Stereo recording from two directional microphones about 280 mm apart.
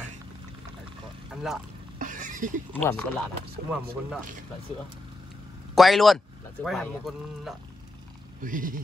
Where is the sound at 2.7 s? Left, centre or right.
Centre.